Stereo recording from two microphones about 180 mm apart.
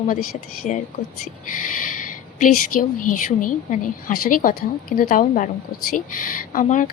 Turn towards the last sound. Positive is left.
turn(degrees=45)  # may be behind; listen again after turning